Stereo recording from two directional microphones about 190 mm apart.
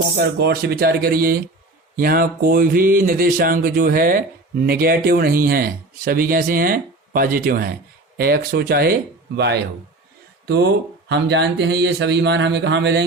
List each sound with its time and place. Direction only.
0.3 s speech: 55° right (ahead or behind)